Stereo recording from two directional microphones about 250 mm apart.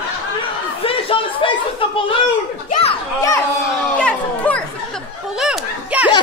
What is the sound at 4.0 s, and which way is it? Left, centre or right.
Chatter, centre.